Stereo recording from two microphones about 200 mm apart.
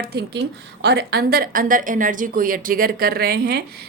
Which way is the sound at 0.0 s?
55° right (ahead or behind).